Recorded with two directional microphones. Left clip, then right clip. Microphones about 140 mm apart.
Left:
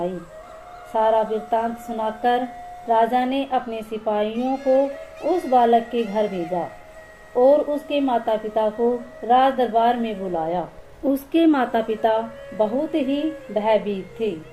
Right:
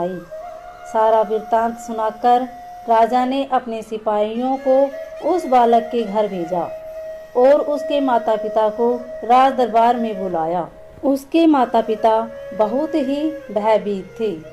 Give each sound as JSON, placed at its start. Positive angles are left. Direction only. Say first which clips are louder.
{"t": 0.9, "sound": "a woman's voice", "louder": "right 4 dB", "side_deg": -45}
{"t": 4.4, "sound": "a child's voice", "louder": "right 4 dB", "side_deg": -65}
{"t": 5.3, "sound": "a woman's voice", "louder": "right 3 dB", "side_deg": -45}
{"t": 11.0, "sound": "a woman's voice", "louder": "right 3 dB", "side_deg": -25}